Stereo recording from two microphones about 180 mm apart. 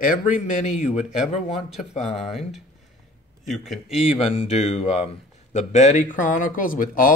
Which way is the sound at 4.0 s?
35° left (ahead or behind).